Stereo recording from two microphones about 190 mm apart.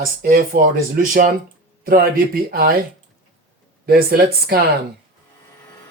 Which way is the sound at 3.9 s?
50° right (ahead or behind).